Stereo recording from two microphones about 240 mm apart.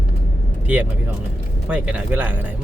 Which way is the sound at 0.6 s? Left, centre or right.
Centre.